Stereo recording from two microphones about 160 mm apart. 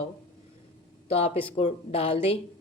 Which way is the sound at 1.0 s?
40° left (ahead or behind).